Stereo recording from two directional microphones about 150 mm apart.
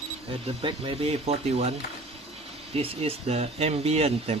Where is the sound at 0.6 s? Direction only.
35° right (ahead or behind).